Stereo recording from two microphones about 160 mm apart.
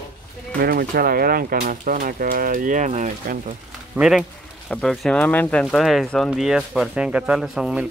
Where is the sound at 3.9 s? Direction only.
5° right (ahead or behind).